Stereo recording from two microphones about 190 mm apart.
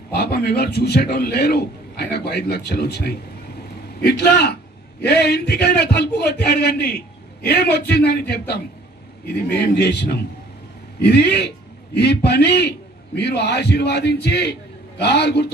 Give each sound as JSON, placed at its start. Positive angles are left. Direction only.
{"t": 0.1, "sound": "a man's voice", "side_deg": 60}
{"t": 9.8, "sound": "a man's voice", "side_deg": 60}